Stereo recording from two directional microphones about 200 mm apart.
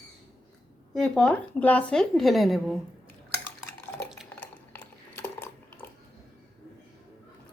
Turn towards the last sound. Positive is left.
turn(degrees=10)  # may be behind; listen again after turning